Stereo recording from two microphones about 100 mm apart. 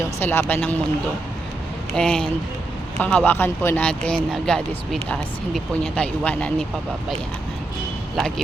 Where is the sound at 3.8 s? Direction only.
10° left (ahead or behind).